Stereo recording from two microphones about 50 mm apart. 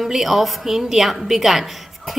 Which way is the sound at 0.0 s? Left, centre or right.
Centre.